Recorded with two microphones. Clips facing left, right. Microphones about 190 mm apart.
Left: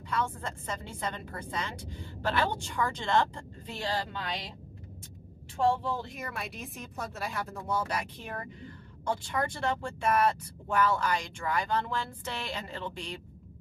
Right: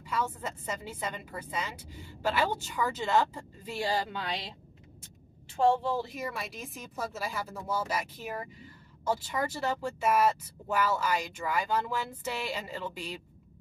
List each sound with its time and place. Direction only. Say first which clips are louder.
0.1 s a woman's voice: even; 5° right (ahead or behind)
5.9 s speech: right 3 dB; centre (ahead or behind)